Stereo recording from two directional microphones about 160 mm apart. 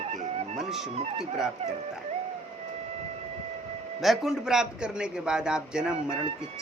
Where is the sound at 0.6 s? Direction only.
5° right (ahead or behind).